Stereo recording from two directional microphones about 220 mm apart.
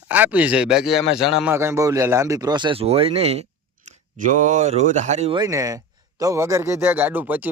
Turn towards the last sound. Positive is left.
turn(degrees=-10)  # may be behind; listen again after turning